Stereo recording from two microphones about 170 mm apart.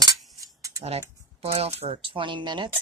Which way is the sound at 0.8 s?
40° right (ahead or behind).